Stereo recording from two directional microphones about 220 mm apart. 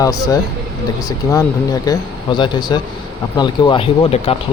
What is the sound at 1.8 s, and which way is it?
Speech, 20° left (ahead or behind).